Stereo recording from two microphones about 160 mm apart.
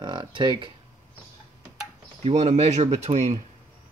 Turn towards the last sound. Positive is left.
turn(degrees=-40)  # may be behind; listen again after turning